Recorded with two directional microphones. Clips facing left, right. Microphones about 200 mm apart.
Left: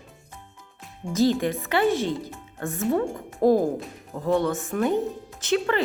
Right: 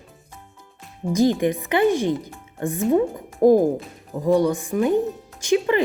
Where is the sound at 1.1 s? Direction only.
15° right (ahead or behind).